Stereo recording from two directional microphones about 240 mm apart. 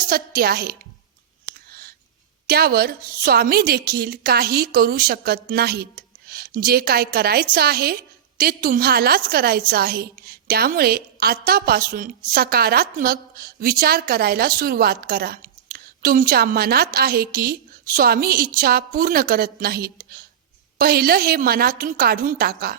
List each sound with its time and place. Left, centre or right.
0.0 s a woman's voice: right
2.5 s a woman's voice: right